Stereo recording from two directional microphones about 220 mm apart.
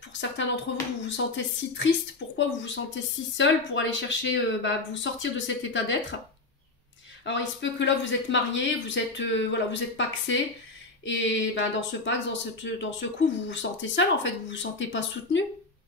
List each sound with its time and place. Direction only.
0.1 s speech: 55° left (ahead or behind)
7.2 s speech: 55° left (ahead or behind)